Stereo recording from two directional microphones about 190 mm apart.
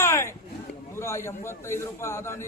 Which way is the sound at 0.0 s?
15° left (ahead or behind).